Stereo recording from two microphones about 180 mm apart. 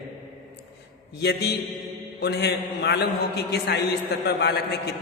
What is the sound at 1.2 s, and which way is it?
A man's voice, 70° left (ahead or behind).